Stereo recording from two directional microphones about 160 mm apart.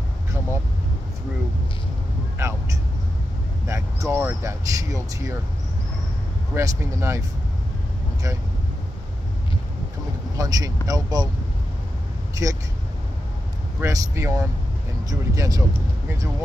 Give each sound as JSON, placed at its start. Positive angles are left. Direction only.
{"t": 2.4, "sound": "speech", "side_deg": -20}
{"t": 3.6, "sound": "speech", "side_deg": -20}
{"t": 6.5, "sound": "speech", "side_deg": -20}
{"t": 10.3, "sound": "speech", "side_deg": -20}
{"t": 13.7, "sound": "speech", "side_deg": -15}